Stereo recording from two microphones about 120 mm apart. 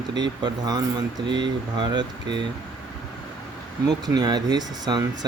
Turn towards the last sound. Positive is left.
turn(degrees=-35)  # may be behind; listen again after turning